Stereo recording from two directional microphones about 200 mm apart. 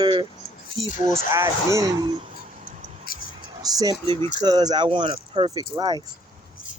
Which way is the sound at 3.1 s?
45° left (ahead or behind).